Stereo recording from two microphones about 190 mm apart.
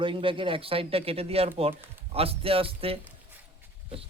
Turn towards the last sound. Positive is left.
turn(degrees=-30)  # may be behind; listen again after turning